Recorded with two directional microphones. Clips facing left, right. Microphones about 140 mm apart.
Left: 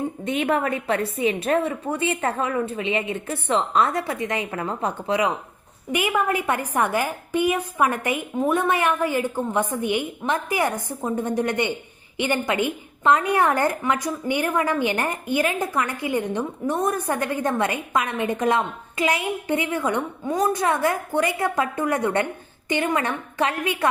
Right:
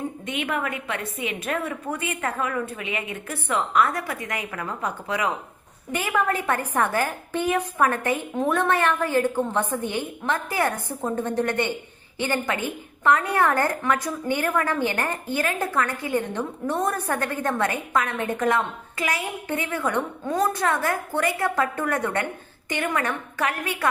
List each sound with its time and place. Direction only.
0.3 s a woman's voice: 35° left (ahead or behind)
5.9 s a woman's voice: 15° left (ahead or behind)